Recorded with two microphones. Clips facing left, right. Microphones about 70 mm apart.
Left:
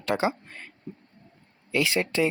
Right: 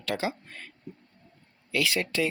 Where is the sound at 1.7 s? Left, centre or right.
Left.